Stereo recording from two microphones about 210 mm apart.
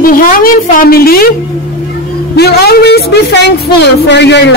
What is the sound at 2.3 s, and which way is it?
A man's voice, 50° left (ahead or behind).